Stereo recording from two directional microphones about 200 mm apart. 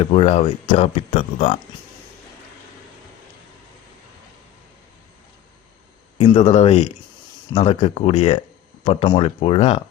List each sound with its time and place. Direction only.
0.0 s speech: 30° left (ahead or behind)
6.1 s speech: 30° left (ahead or behind)